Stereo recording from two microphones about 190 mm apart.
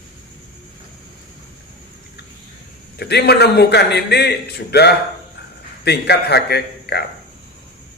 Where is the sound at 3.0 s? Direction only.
60° left (ahead or behind).